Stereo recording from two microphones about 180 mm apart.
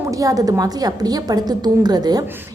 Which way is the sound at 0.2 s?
20° right (ahead or behind).